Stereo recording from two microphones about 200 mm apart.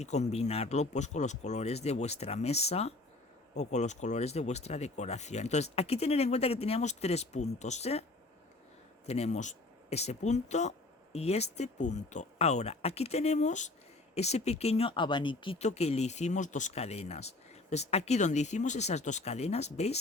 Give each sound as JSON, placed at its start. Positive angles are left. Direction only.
{"t": 0.0, "sound": "speech", "side_deg": 35}
{"t": 9.0, "sound": "speech", "side_deg": 30}